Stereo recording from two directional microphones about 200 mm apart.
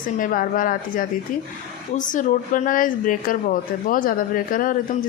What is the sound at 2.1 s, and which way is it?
A woman's voice, 40° left (ahead or behind).